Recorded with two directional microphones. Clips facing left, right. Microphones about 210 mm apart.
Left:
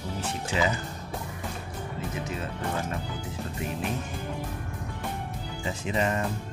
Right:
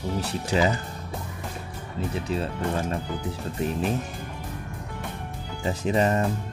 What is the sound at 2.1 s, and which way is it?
Speech, 30° right (ahead or behind).